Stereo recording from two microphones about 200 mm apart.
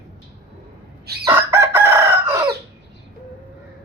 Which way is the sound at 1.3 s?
10° right (ahead or behind).